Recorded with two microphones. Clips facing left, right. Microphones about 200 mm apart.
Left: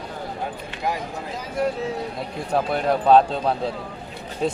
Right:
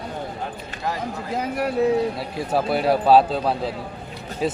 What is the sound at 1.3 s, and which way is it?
Speech, 65° right (ahead or behind).